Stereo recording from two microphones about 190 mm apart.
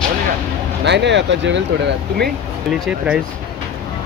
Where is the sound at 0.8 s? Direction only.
65° right (ahead or behind).